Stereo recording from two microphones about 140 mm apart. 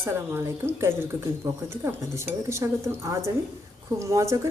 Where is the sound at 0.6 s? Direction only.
15° right (ahead or behind).